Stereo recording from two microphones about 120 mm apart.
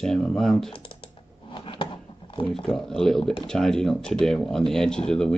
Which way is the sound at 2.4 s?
45° left (ahead or behind).